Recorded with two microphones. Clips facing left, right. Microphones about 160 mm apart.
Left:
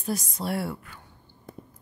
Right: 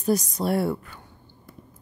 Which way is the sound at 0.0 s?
40° right (ahead or behind).